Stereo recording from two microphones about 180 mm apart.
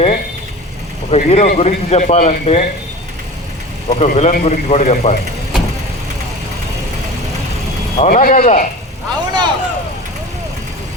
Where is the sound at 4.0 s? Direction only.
40° left (ahead or behind).